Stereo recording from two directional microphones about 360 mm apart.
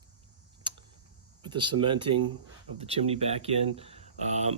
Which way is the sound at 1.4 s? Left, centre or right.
Centre.